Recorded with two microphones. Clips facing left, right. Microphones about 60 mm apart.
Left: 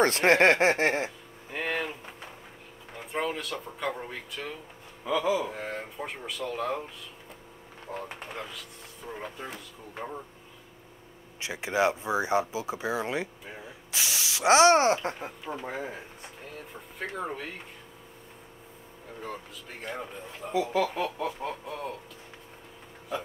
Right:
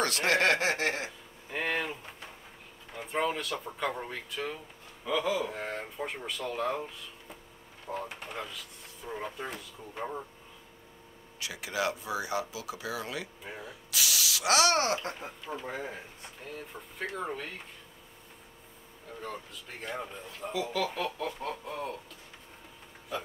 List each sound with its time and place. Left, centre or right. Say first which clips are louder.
0.0 s speech: left 6 dB; left
1.5 s speech: left 1 dB; centre
8.1 s speech: left 1 dB; centre
11.3 s speech: left 6 dB; left
15.4 s a sound: left 2 dB; centre
17.1 s a sound: left 2 dB; centre
19.2 s speech: left 1 dB; centre
20.7 s a sound: left 4 dB; centre
21.6 s speech: left 1 dB; centre